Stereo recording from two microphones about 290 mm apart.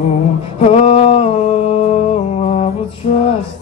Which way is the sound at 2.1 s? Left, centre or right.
Left.